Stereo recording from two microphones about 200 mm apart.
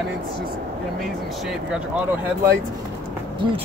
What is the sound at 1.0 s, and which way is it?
Speech, centre (ahead or behind).